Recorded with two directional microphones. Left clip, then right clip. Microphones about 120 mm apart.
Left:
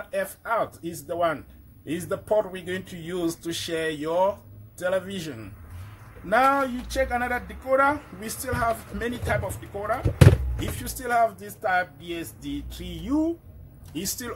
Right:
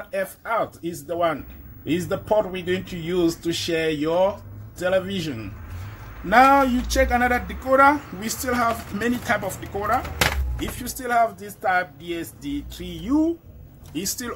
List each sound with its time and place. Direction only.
0.1 s speech: 25° left (ahead or behind)
6.2 s speech: 10° left (ahead or behind)